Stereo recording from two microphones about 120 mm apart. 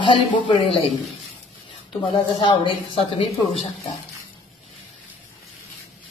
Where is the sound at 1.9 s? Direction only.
45° left (ahead or behind).